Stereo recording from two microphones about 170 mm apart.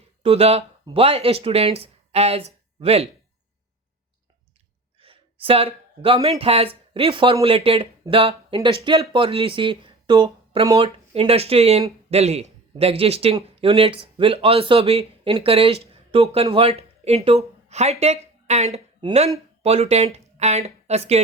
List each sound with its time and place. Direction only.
0.2 s speech: 35° right (ahead or behind)
4.9 s a sound: 35° right (ahead or behind)
6.4 s speech: 35° right (ahead or behind)